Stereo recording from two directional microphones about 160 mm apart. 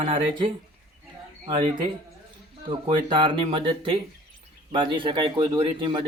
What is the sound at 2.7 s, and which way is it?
Speech, 30° right (ahead or behind).